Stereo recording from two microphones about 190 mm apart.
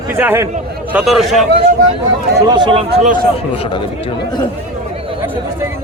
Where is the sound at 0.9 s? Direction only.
Centre (ahead or behind).